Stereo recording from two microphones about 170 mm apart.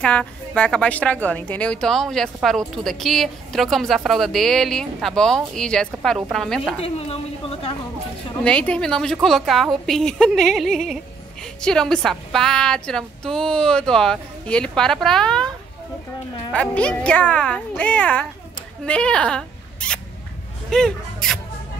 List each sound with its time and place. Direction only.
0.0 s a woman's voice: 5° left (ahead or behind)
6.8 s a woman's voice: 35° left (ahead or behind)
8.5 s a woman's voice: 5° left (ahead or behind)
16.5 s a woman's voice: 5° left (ahead or behind)